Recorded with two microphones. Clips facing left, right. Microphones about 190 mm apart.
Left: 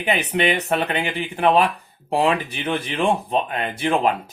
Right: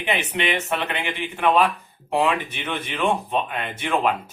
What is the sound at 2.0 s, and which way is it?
Speech, 35° left (ahead or behind).